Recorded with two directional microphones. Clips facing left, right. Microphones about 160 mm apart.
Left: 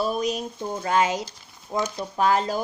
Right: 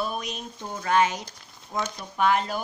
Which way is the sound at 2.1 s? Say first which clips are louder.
Left 1 dB; 35° left (ahead or behind).